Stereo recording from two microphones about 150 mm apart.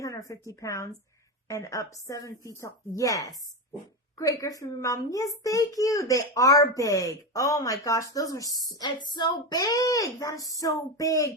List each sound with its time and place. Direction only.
0.0 s a woman's voice: 20° left (ahead or behind)